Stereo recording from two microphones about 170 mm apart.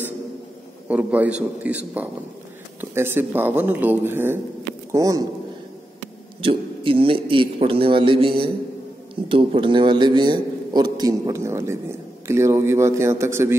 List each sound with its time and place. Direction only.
0.8 s a man's voice: 10° right (ahead or behind)
6.4 s a man's voice: 30° right (ahead or behind); by 13.6 s 15° right (ahead or behind)